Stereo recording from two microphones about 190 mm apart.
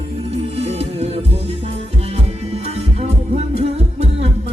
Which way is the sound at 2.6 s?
35° right (ahead or behind).